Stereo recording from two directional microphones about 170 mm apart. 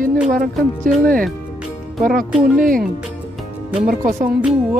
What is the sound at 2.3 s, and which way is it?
Music, 5° right (ahead or behind).